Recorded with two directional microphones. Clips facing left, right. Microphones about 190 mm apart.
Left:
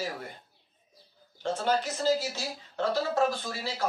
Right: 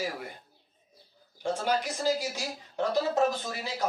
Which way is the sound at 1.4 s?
15° right (ahead or behind).